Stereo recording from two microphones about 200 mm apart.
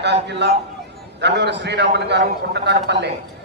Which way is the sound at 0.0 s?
60° right (ahead or behind).